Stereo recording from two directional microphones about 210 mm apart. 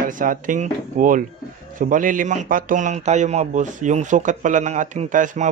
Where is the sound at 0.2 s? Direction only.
40° right (ahead or behind).